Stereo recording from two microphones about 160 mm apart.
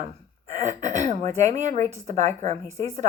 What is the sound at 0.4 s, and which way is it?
Speech, 45° right (ahead or behind).